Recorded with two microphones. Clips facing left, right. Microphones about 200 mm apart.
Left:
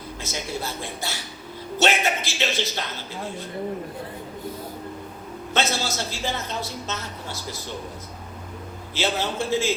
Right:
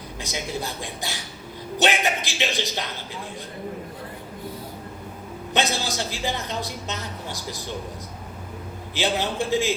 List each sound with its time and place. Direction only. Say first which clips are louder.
0.2 s a woman's voice: right 1 dB; 15° right (ahead or behind)
5.5 s a woman's voice: even; 15° right (ahead or behind)
9.0 s a woman's voice: right 1 dB; 15° right (ahead or behind)